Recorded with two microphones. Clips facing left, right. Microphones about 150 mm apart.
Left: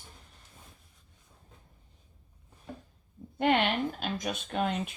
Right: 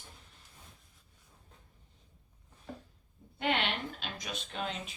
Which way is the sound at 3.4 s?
45° left (ahead or behind).